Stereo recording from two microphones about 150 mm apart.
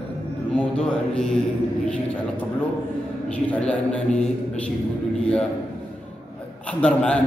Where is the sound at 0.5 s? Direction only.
5° left (ahead or behind).